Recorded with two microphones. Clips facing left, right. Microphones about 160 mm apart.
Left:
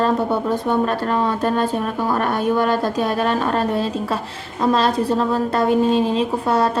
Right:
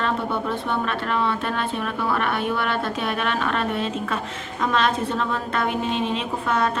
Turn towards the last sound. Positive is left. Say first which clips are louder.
# left 5 dB
turn(degrees=35)  # may be behind; listen again after turning